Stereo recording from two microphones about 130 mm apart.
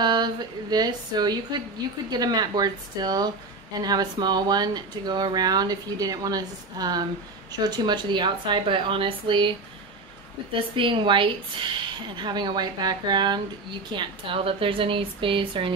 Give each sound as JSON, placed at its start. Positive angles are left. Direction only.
{"t": 0.0, "sound": "speech", "side_deg": -35}
{"t": 10.5, "sound": "speech", "side_deg": -40}